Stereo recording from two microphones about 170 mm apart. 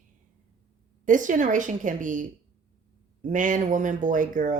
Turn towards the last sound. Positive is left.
turn(degrees=-50)  # may be behind; listen again after turning